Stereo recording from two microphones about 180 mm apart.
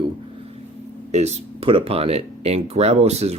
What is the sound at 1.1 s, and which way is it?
Speech, 40° right (ahead or behind).